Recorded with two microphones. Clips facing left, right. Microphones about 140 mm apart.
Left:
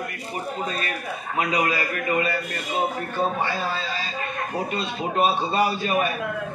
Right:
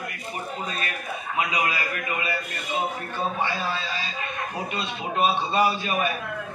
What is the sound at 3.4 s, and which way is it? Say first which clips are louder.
A man's voice: left 1 dB; 45° left (ahead or behind).